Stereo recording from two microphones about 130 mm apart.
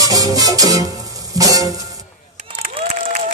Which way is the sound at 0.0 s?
30° right (ahead or behind).